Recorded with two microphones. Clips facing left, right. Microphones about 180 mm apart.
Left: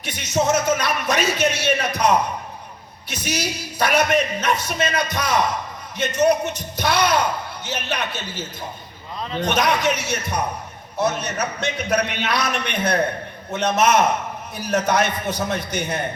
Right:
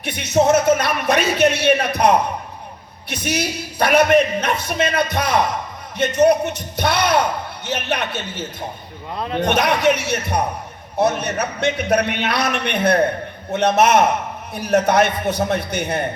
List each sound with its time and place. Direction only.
0.0 s speech: 60° right (ahead or behind)